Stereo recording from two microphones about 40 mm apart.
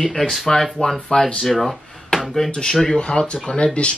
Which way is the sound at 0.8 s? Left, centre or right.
Left.